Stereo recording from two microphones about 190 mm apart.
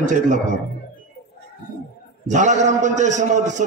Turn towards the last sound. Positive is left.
turn(degrees=-40)  # may be behind; listen again after turning